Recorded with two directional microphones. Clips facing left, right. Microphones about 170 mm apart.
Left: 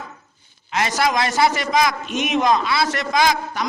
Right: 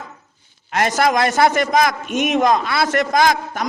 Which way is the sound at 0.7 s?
50° right (ahead or behind).